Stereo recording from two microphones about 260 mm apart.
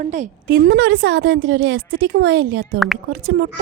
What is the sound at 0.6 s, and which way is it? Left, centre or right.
Speech, right.